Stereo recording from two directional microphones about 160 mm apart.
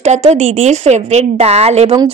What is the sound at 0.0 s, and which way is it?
Speech, 45° right (ahead or behind).